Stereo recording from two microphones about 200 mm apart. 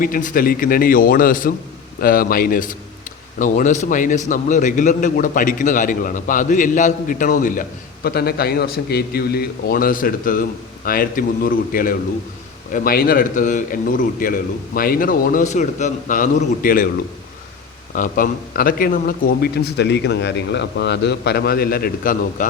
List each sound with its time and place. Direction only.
0.0 s a man's voice: 45° left (ahead or behind)
17.9 s a man's voice: 45° left (ahead or behind)